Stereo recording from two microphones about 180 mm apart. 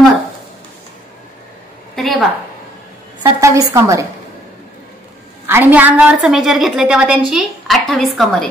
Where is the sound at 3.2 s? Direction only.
15° right (ahead or behind).